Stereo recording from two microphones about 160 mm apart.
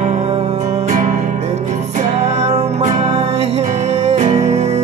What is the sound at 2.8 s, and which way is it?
Music, 45° right (ahead or behind).